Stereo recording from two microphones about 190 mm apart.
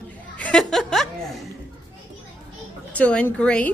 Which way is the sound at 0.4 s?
5° left (ahead or behind).